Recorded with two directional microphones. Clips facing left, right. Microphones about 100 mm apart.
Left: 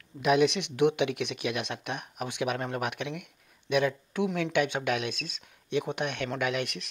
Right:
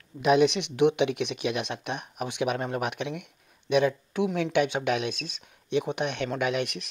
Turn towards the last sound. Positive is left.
turn(degrees=-20)  # may be behind; listen again after turning